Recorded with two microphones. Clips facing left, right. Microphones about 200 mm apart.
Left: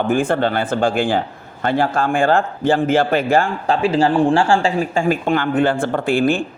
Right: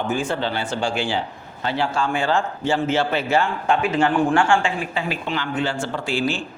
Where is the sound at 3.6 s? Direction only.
35° left (ahead or behind).